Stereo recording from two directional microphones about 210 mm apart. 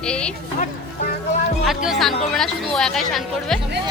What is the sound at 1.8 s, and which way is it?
Speech, centre (ahead or behind).